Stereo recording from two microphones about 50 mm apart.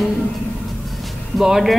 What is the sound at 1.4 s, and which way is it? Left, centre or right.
Speech, centre.